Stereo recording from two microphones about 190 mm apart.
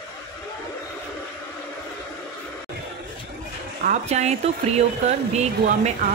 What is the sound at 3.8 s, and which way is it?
Speech, 35° right (ahead or behind).